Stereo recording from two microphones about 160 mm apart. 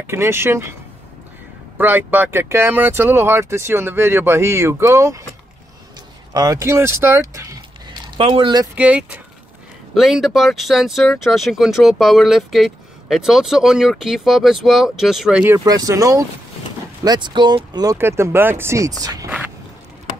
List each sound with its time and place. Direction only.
0.0 s speech: 15° right (ahead or behind)
1.8 s speech: 10° right (ahead or behind)
6.3 s speech: 20° right (ahead or behind)
7.9 s a sound: 30° right (ahead or behind)
8.7 s speech: 10° right (ahead or behind)
15.5 s speech: 25° right (ahead or behind)